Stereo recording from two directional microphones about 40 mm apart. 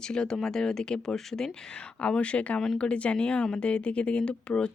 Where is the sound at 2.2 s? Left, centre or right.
Left.